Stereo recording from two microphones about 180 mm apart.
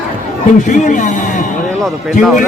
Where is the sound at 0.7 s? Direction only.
45° left (ahead or behind).